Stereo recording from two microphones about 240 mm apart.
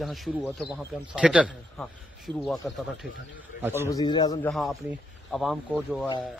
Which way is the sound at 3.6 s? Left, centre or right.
Centre.